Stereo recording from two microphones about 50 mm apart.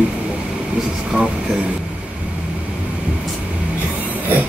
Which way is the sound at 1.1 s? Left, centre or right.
Right.